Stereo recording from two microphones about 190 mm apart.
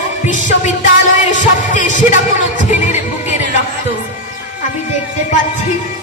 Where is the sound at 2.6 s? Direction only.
40° left (ahead or behind).